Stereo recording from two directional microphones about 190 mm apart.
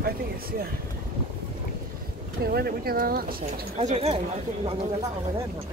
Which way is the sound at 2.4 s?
55° right (ahead or behind).